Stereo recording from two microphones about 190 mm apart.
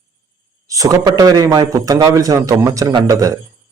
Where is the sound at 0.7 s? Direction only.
20° right (ahead or behind).